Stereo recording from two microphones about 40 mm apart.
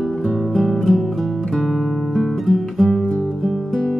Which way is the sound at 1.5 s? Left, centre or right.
Centre.